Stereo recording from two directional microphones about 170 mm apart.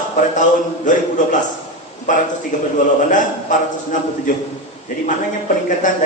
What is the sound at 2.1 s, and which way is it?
A man's voice, 50° left (ahead or behind).